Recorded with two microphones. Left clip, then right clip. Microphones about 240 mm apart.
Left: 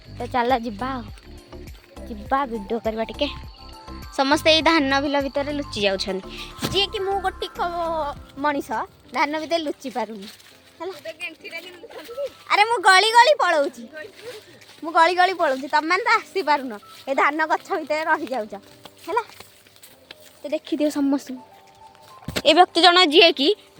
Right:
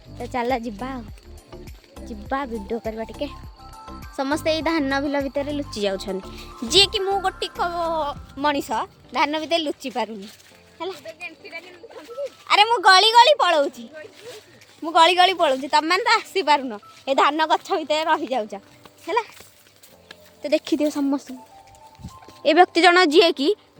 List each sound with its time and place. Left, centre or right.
0.2 s speech: centre
1.5 s music: centre
2.8 s speech: centre
11.0 s speech: left
12.5 s speech: centre
14.8 s a woman's voice: centre
20.4 s speech: right
20.7 s speech: centre
22.4 s a woman's voice: centre